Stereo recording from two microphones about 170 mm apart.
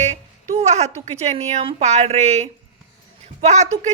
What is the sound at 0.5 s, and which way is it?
A woman's voice, 40° right (ahead or behind).